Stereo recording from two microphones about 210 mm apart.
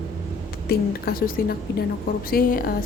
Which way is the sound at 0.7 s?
45° left (ahead or behind).